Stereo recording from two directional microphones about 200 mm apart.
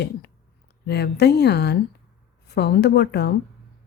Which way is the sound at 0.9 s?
55° left (ahead or behind).